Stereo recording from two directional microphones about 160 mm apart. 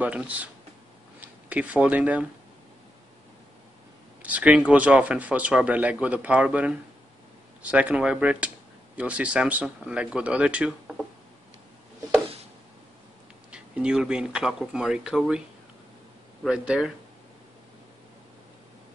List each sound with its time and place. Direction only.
0.0 s speech: 10° right (ahead or behind)
4.2 s speech: 10° right (ahead or behind)
13.5 s speech: 5° right (ahead or behind)
16.4 s speech: 5° right (ahead or behind)